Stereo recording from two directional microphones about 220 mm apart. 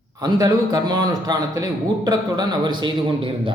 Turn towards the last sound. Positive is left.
turn(degrees=-20)  # may be behind; listen again after turning